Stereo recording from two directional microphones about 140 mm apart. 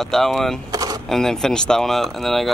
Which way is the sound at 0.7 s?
25° right (ahead or behind).